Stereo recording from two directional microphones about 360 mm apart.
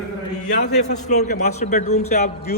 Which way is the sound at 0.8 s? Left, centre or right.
Centre.